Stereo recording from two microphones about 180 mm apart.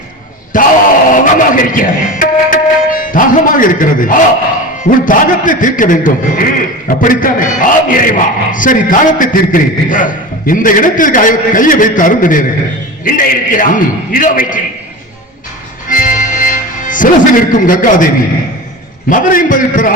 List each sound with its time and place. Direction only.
0.5 s a man's voice: 50° left (ahead or behind)
1.1 s music: 50° left (ahead or behind)
4.8 s a man's voice: 50° left (ahead or behind)
15.9 s music: 50° left (ahead or behind)
19.0 s a man's voice: 45° left (ahead or behind)